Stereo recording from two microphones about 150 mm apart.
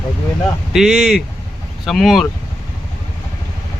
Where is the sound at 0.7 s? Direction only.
5° right (ahead or behind).